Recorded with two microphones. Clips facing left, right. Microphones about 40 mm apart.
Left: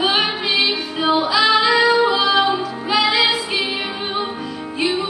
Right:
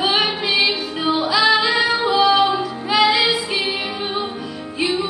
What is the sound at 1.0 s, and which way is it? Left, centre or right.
Music, left.